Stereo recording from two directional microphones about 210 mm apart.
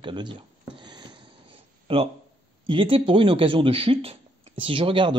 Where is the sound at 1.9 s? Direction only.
25° right (ahead or behind).